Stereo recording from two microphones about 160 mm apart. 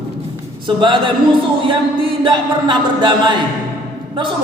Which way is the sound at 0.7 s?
30° right (ahead or behind).